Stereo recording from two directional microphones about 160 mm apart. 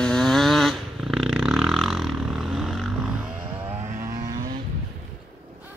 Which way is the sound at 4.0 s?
20° right (ahead or behind).